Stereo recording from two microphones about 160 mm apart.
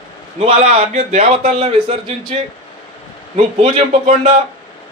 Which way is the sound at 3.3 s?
50° right (ahead or behind).